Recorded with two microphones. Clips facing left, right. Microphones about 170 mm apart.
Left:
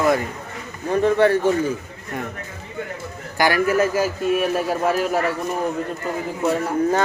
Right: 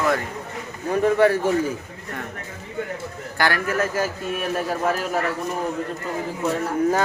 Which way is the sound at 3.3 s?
15° left (ahead or behind).